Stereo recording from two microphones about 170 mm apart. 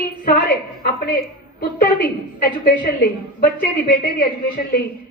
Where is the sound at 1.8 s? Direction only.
60° left (ahead or behind).